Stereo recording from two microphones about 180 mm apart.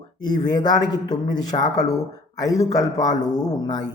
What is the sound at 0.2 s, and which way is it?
A man's voice, 25° left (ahead or behind).